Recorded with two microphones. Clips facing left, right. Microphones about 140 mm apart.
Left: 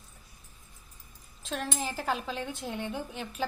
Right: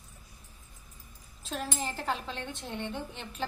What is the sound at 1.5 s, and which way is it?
A woman's voice, 5° right (ahead or behind).